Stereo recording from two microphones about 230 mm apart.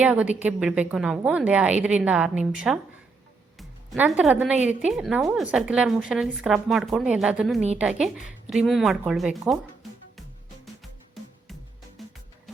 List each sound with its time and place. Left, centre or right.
0.0 s a woman's voice: centre
3.6 s music: centre
4.2 s a woman's voice: centre
12.0 s music: centre